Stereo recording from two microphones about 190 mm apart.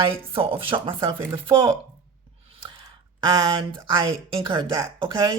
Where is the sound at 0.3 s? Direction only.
30° right (ahead or behind).